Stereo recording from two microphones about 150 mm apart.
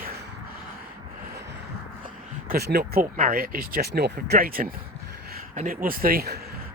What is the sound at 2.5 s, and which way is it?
Speech, 90° right.